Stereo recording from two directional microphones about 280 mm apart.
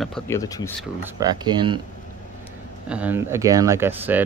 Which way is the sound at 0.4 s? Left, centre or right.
Centre.